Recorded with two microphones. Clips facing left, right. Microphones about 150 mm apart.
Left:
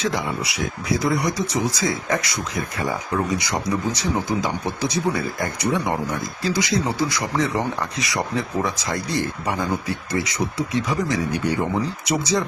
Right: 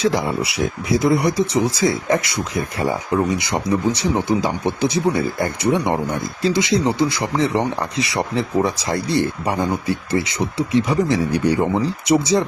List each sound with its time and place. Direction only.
0.0 s speech: 30° right (ahead or behind)